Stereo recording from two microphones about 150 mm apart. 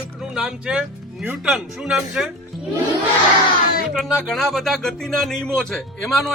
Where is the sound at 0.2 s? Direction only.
5° right (ahead or behind).